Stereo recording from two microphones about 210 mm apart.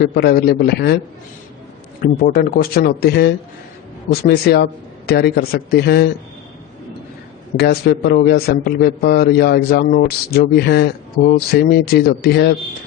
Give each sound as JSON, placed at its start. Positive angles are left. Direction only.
{"t": 0.0, "sound": "a man's voice", "side_deg": 45}
{"t": 2.0, "sound": "a man's voice", "side_deg": 45}
{"t": 7.5, "sound": "a man's voice", "side_deg": 50}